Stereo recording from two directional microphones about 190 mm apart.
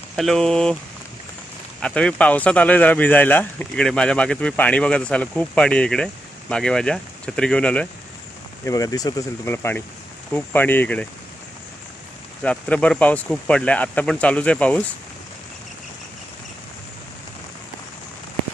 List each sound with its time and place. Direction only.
0.1 s speech: centre (ahead or behind)
1.8 s speech: 5° left (ahead or behind)
8.6 s speech: 20° left (ahead or behind)
12.4 s speech: 5° left (ahead or behind)